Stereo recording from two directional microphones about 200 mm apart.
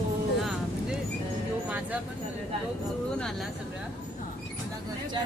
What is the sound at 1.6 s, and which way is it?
Speech, 5° right (ahead or behind).